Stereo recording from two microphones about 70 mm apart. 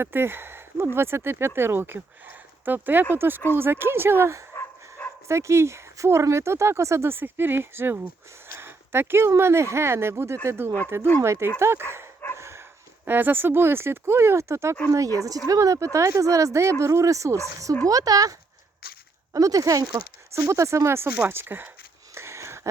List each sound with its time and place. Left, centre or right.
0.0 s speech: right
12.4 s dog: right
13.1 s speech: right
14.8 s speech: right
17.8 s speech: right
20.3 s speech: right
22.1 s a sound: right